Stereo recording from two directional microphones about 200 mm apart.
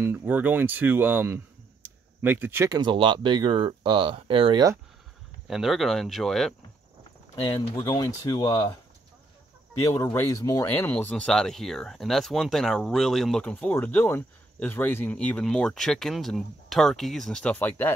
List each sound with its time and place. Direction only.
0.0 s speech: 10° right (ahead or behind)
2.8 s speech: 25° right (ahead or behind)
5.5 s speech: centre (ahead or behind)
7.4 s speech: 20° left (ahead or behind)
9.8 s speech: 15° left (ahead or behind)